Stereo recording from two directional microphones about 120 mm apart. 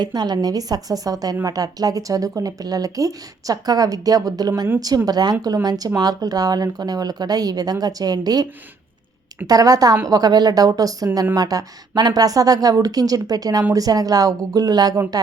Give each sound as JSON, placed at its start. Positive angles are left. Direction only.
{"t": 0.0, "sound": "a woman's voice", "side_deg": -35}
{"t": 9.5, "sound": "a woman's voice", "side_deg": -30}